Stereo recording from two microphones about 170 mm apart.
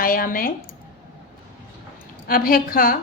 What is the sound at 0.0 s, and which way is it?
Speech, 55° left (ahead or behind).